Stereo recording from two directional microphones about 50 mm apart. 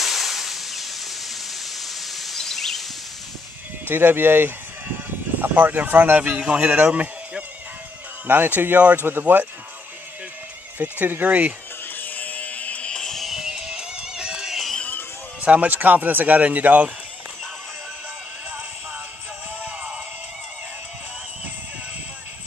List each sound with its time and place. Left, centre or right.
0.0 s a sound: centre
3.8 s chicken: right
5.9 s speech: right
6.1 s a man's voice: right
10.8 s speech: right
12.0 s a sound: left
12.9 s music: centre
13.4 s music: centre
15.4 s speech: right
19.6 s music: right